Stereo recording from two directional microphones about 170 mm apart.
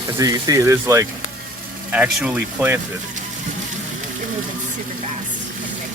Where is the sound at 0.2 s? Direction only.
20° right (ahead or behind).